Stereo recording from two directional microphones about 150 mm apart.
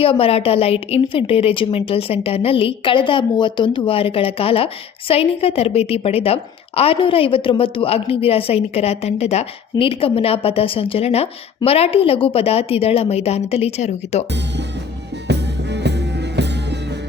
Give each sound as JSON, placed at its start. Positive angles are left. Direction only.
{"t": 0.0, "sound": "a woman's voice", "side_deg": 40}